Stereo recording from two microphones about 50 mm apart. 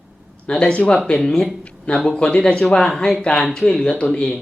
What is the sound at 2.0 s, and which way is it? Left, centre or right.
Speech, centre.